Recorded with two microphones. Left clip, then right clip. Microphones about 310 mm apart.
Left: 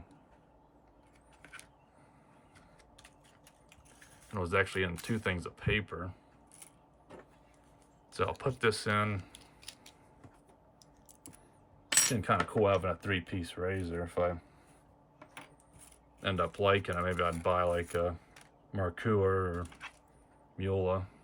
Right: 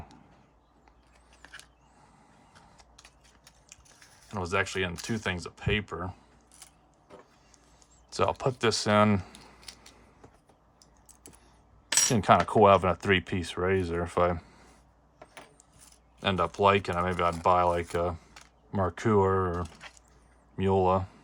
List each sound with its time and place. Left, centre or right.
1.4 s mechanisms: centre
2.7 s a sound: centre
4.3 s speech: centre
8.1 s speech: centre
12.1 s speech: centre
16.2 s speech: centre